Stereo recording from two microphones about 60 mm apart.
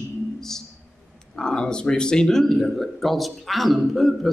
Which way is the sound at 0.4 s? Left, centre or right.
Centre.